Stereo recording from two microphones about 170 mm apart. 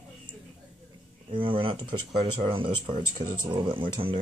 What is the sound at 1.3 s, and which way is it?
Speech, 30° right (ahead or behind).